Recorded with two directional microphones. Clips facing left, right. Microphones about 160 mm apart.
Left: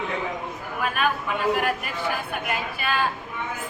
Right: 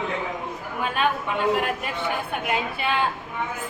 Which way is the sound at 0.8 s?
25° right (ahead or behind).